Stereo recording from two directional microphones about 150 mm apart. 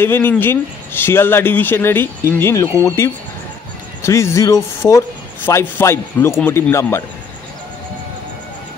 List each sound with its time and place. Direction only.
0.0 s speech: 15° left (ahead or behind)